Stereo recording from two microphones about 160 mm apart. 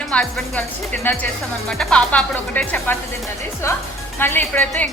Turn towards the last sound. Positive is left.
turn(degrees=10)  # may be behind; listen again after turning